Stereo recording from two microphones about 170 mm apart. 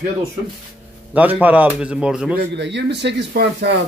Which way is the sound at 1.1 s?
10° right (ahead or behind).